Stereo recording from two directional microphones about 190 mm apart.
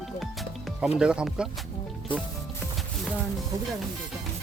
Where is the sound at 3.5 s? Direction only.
20° right (ahead or behind).